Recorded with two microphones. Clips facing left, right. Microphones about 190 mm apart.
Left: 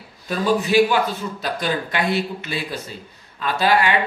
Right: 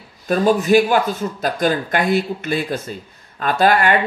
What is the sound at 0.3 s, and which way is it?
A man's voice, 45° right (ahead or behind).